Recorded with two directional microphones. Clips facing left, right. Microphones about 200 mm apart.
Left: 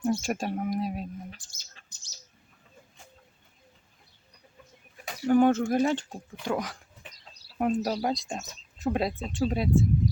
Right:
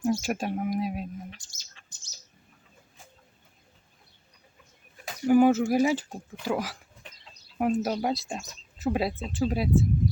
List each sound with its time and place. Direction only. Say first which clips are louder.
0.0 s speech: right 1 dB; centre (ahead or behind)
1.8 s bird: right 1 dB; 40° left (ahead or behind)
5.0 s speech: right 2 dB; 5° right (ahead or behind)